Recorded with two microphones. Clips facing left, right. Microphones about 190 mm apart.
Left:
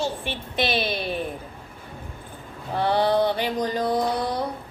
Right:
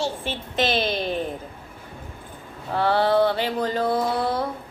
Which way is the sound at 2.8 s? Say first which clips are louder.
Right 1 dB; 15° left (ahead or behind).